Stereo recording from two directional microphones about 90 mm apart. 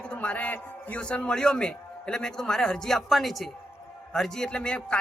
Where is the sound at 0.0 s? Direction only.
15° left (ahead or behind).